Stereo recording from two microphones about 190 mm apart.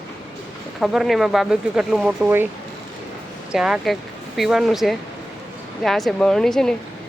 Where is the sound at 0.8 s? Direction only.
Centre (ahead or behind).